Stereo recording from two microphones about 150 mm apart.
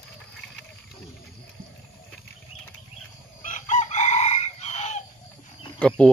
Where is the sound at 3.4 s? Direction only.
55° left (ahead or behind).